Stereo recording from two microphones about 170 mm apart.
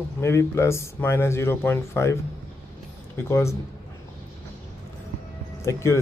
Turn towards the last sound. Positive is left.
turn(degrees=15)  # may be behind; listen again after turning